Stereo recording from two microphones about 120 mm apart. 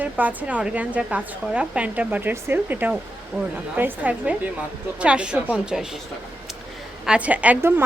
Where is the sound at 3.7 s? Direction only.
15° right (ahead or behind).